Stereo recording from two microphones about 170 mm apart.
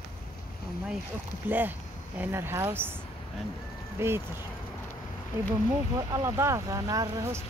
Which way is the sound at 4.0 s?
15° right (ahead or behind).